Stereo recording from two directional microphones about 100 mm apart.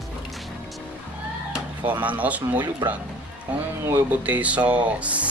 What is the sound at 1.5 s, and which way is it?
Speech, 15° right (ahead or behind).